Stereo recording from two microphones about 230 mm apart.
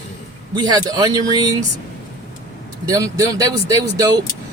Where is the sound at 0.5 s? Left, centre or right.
Centre.